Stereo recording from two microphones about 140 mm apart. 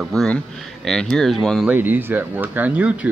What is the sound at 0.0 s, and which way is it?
Speech, centre (ahead or behind).